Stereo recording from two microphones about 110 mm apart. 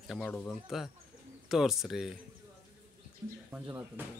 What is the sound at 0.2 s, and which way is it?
Speech, 15° left (ahead or behind).